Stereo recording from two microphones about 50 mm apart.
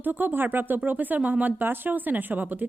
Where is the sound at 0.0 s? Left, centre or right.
Right.